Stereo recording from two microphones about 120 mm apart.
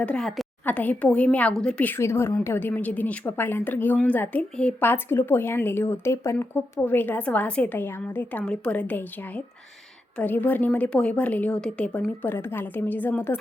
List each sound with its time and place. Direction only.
0.0 s a woman's voice: 5° left (ahead or behind)
0.6 s a woman's voice: 15° left (ahead or behind)